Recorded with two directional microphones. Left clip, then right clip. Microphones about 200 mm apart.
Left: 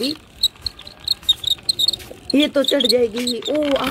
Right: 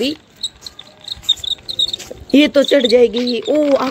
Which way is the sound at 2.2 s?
10° right (ahead or behind).